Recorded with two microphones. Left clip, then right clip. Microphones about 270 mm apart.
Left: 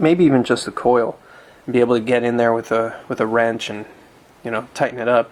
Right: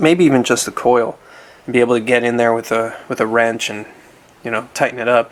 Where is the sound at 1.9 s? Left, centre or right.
Centre.